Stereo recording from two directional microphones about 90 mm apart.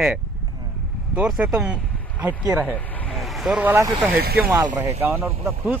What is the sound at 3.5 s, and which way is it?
Speech, 20° right (ahead or behind).